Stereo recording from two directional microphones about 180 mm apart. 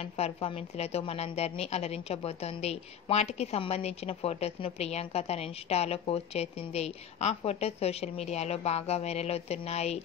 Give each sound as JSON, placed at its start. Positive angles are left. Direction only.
{"t": 0.0, "sound": "a woman's voice", "side_deg": 35}